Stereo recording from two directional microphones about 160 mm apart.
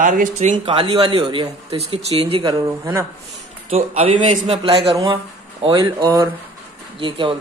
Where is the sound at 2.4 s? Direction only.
20° right (ahead or behind).